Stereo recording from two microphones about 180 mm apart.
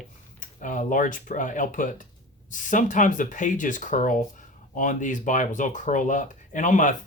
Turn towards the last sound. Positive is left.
turn(degrees=45)  # may be behind; listen again after turning